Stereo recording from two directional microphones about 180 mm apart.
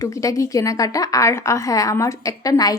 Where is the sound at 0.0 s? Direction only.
20° left (ahead or behind).